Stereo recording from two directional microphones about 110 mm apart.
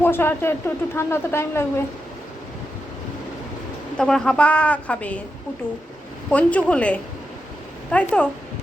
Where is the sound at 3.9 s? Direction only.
5° left (ahead or behind).